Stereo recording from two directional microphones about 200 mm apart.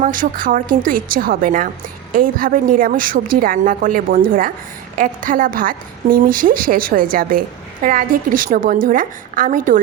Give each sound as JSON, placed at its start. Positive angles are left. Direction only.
{"t": 0.0, "sound": "a woman's voice", "side_deg": -45}